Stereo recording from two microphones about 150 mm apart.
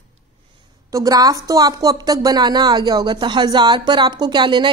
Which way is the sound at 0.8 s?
25° right (ahead or behind).